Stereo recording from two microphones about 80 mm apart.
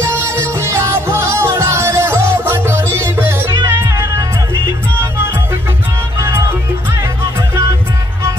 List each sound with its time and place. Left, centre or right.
0.0 s music: right
6.1 s music: right